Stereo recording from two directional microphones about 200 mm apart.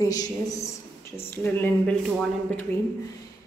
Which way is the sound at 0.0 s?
15° left (ahead or behind).